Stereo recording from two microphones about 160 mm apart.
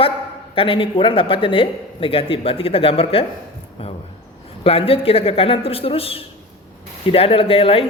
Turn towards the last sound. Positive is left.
turn(degrees=35)  # may be behind; listen again after turning